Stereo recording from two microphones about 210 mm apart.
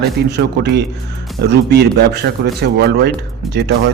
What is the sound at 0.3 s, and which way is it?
Speech, 50° right (ahead or behind).